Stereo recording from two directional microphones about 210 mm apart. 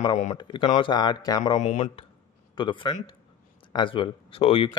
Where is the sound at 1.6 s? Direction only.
30° left (ahead or behind).